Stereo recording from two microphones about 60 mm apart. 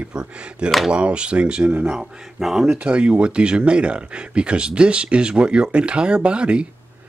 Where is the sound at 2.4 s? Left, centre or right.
Centre.